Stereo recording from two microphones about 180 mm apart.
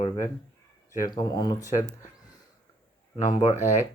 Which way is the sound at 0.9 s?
20° left (ahead or behind).